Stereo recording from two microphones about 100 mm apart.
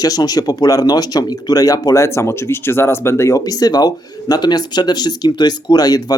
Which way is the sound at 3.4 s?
40° left (ahead or behind).